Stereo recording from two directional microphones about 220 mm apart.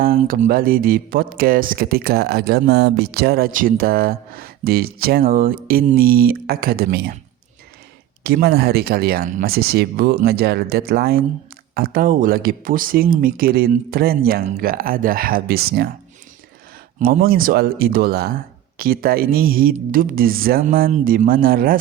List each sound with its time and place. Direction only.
0.0 s speech: 40° right (ahead or behind)
8.2 s speech: 45° right (ahead or behind)
17.0 s speech: 40° right (ahead or behind)